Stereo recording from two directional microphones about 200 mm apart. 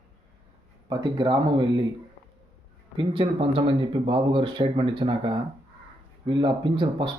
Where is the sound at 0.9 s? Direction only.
20° right (ahead or behind).